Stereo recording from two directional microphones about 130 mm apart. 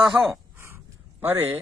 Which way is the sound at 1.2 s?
15° right (ahead or behind).